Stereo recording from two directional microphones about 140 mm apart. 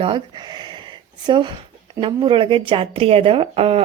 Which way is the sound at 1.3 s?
30° right (ahead or behind).